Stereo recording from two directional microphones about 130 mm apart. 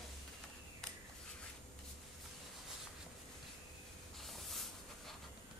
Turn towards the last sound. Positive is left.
turn(degrees=0)  # may be behind; listen again after turning